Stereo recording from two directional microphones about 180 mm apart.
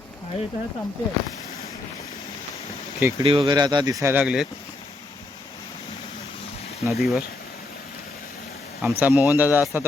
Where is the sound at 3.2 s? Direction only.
30° right (ahead or behind); by 4.5 s 5° right (ahead or behind).